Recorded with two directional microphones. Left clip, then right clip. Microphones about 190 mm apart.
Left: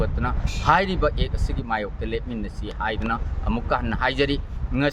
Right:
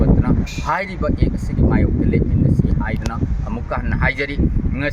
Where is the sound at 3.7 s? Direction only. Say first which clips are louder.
Right 2 dB; 20° left (ahead or behind).